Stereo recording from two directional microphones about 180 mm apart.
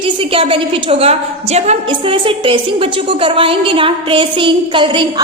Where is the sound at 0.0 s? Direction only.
30° right (ahead or behind).